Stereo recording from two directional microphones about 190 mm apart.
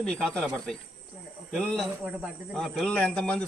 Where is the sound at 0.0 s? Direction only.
5° left (ahead or behind).